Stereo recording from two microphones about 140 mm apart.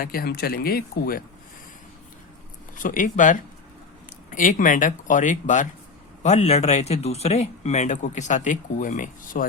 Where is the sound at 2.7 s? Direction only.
70° left (ahead or behind).